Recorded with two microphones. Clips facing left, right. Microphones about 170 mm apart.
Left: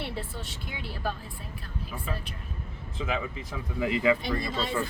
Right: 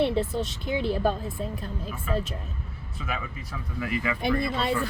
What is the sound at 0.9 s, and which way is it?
Speech, 50° right (ahead or behind).